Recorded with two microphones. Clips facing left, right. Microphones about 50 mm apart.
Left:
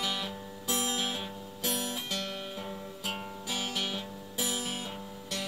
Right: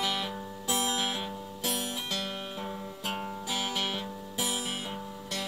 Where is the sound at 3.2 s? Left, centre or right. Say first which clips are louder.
Right 3 dB; centre.